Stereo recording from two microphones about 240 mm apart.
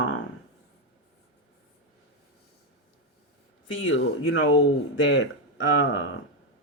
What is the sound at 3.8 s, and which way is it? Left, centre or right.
Speech, left.